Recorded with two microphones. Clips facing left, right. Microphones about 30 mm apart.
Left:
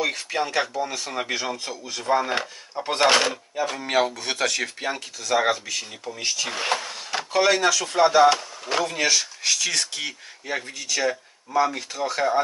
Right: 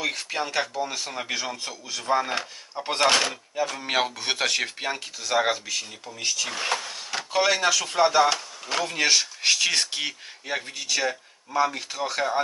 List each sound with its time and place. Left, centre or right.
0.0 s speech: centre
0.7 s speech: centre
1.1 s speech: centre
3.8 s speech: centre
7.4 s speech: centre
8.0 s speech: centre
9.0 s speech: right; by 12.4 s centre